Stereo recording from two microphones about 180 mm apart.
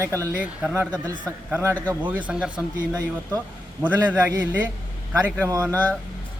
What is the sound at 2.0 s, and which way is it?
Speech, 10° right (ahead or behind).